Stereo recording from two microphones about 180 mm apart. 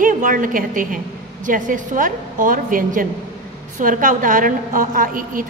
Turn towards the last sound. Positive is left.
turn(degrees=-50)  # may be behind; listen again after turning